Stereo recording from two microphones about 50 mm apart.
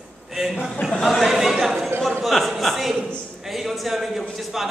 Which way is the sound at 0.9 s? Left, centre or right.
Centre.